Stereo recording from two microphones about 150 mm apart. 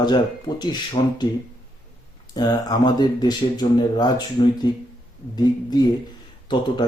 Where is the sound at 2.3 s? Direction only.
25° left (ahead or behind).